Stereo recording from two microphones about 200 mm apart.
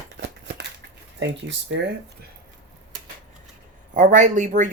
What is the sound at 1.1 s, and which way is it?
Speech, 65° right (ahead or behind).